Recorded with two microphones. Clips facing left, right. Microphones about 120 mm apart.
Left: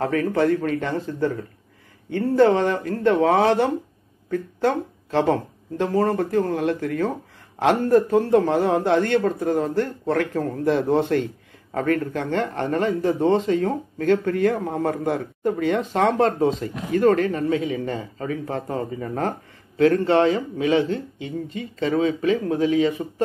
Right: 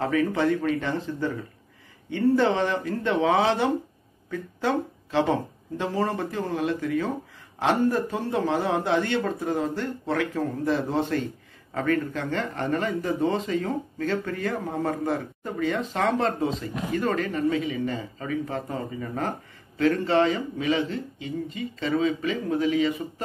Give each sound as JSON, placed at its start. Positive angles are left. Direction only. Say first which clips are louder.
{"t": 0.0, "sound": "a man's voice", "louder": "left 3 dB", "side_deg": 50}